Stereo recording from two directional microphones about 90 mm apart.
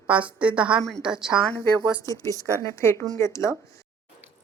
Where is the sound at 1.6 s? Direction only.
35° right (ahead or behind).